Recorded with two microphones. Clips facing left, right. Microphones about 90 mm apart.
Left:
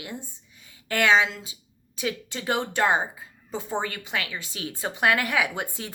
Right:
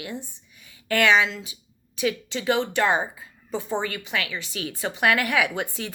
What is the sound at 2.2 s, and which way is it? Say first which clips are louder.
A woman's voice: right 4 dB; 45° left (ahead or behind).